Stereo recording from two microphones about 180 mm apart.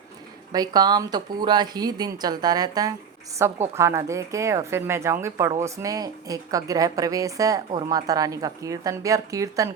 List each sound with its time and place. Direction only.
0.5 s a woman's voice: 20° right (ahead or behind)